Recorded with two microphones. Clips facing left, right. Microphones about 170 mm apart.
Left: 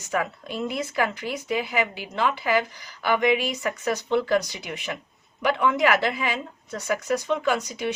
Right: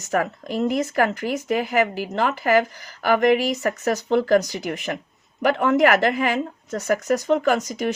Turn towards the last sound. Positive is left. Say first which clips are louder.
# right 4 dB
turn(degrees=-45)  # may be behind; listen again after turning